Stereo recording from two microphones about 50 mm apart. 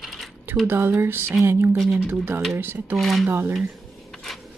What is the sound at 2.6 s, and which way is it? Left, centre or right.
Speech, right.